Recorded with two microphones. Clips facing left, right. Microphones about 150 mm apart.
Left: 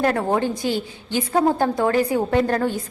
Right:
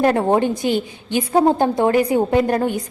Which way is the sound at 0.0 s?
25° right (ahead or behind).